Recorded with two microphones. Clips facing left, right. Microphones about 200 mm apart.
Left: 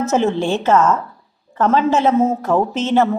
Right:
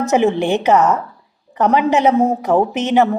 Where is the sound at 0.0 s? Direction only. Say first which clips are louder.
Right 2 dB; 15° right (ahead or behind).